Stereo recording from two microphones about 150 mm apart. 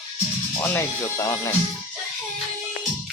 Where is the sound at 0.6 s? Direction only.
20° left (ahead or behind).